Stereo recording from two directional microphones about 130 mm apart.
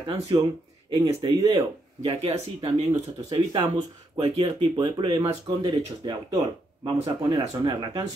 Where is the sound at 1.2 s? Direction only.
35° right (ahead or behind).